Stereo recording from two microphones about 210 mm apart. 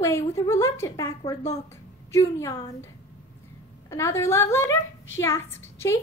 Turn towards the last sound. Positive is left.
turn(degrees=10)  # may be behind; listen again after turning